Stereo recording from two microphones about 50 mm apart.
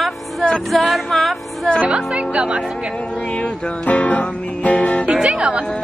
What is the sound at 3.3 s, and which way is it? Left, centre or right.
Music, centre.